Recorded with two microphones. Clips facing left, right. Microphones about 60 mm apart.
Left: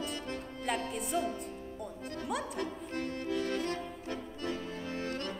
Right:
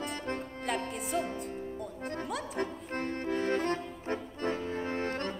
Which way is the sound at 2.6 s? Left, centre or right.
Right.